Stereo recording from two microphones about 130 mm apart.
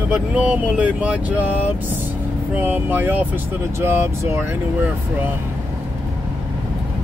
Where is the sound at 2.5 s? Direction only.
15° right (ahead or behind).